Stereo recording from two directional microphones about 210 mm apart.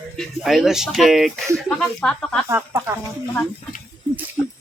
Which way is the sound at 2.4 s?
15° right (ahead or behind).